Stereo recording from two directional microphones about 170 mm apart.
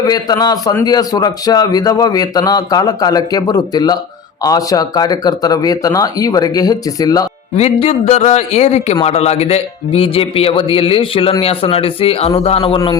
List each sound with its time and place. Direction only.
0.0 s a man's voice: 20° left (ahead or behind)
7.5 s speech: 40° left (ahead or behind)